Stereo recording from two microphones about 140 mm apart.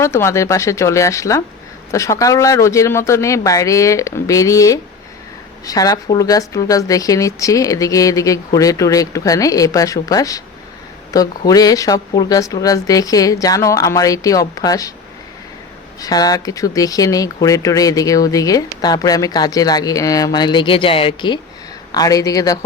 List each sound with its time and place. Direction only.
0.0 s speech: 20° left (ahead or behind)
16.0 s speech: 25° left (ahead or behind)
21.9 s speech: 25° left (ahead or behind)